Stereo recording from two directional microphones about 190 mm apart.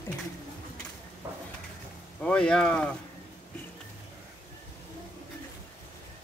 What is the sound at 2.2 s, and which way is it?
Speech, 5° left (ahead or behind).